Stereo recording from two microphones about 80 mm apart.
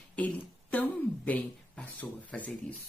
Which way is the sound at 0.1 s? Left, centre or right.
Centre.